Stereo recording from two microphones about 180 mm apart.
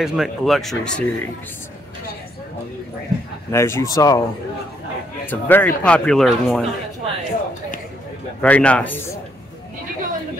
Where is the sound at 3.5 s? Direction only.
15° left (ahead or behind).